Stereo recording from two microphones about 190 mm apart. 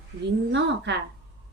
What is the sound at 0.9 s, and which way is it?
Speech, 65° right (ahead or behind).